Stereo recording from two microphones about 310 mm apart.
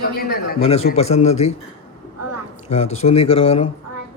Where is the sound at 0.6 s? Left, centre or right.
Centre.